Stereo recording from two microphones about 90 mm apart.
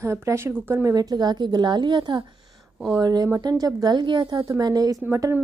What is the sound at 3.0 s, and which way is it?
A woman's voice, 45° right (ahead or behind).